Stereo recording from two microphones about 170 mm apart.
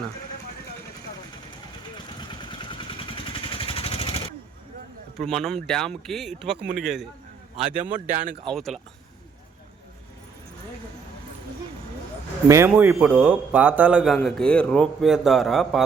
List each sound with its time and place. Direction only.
2.1 s vehicle: 25° left (ahead or behind)
5.1 s a man's voice: centre (ahead or behind)
7.9 s speech: 45° right (ahead or behind)
8.4 s a man's voice: centre (ahead or behind)
12.5 s a man's voice: 15° right (ahead or behind)